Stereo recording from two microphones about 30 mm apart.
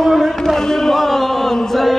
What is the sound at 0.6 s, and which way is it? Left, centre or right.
Chant, centre.